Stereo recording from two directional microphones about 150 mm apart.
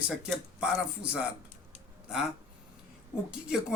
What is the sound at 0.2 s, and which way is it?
Speech, 5° right (ahead or behind).